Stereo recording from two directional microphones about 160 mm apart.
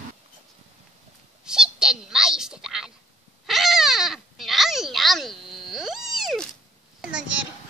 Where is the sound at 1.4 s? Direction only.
5° right (ahead or behind).